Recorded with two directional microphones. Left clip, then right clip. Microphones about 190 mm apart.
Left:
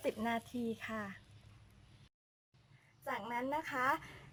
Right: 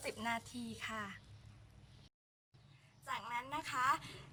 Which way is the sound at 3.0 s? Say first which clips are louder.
Left 3 dB; 35° left (ahead or behind).